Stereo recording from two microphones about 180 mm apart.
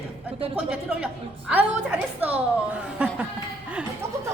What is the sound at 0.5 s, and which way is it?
A woman's voice, 5° right (ahead or behind).